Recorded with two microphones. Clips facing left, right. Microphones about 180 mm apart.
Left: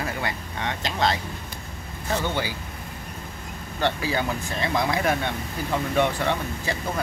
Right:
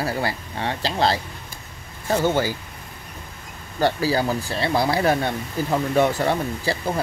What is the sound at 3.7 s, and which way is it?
Speech, 40° right (ahead or behind).